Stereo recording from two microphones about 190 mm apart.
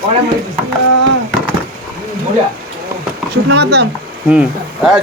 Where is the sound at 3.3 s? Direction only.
60° right (ahead or behind).